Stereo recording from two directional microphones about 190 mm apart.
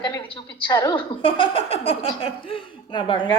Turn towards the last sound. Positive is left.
turn(degrees=25)  # may be behind; listen again after turning